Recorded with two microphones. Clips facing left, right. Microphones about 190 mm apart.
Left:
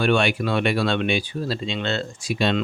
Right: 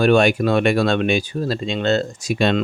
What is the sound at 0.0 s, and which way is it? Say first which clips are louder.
Speech: right 6 dB; 40° right (ahead or behind).